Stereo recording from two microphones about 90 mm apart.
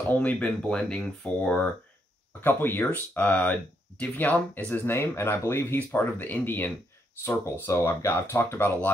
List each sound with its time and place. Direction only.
0.2 s speech: 15° left (ahead or behind)
2.4 s speech: 25° left (ahead or behind)